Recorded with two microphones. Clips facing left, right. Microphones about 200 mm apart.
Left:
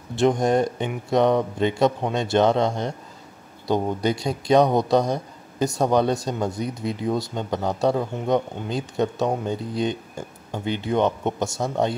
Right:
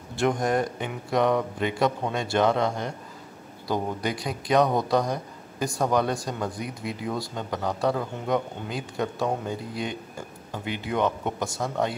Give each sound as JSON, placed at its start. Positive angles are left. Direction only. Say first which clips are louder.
{"t": 0.1, "sound": "a man's voice", "louder": "left 5 dB", "side_deg": 25}